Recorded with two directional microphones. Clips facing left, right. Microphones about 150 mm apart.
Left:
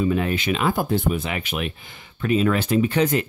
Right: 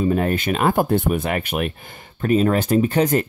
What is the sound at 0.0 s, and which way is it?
Speech, 45° right (ahead or behind).